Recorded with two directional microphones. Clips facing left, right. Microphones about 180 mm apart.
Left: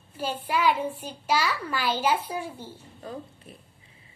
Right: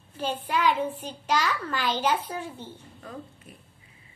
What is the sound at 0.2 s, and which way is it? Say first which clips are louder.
A child's voice: even; 10° left (ahead or behind).